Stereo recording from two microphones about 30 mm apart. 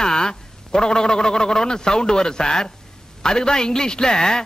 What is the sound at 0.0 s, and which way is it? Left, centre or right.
A man's voice, left.